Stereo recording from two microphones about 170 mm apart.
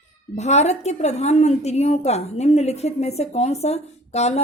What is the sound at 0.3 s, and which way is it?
A woman's voice, 40° left (ahead or behind).